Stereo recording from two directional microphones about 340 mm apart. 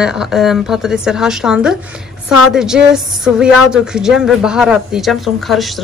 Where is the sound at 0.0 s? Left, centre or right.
Centre.